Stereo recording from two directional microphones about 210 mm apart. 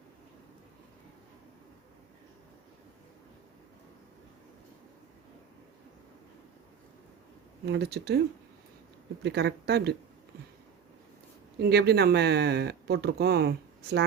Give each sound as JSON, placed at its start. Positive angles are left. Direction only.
{"t": 7.6, "sound": "speech", "side_deg": -50}
{"t": 9.2, "sound": "speech", "side_deg": -50}
{"t": 11.6, "sound": "speech", "side_deg": -50}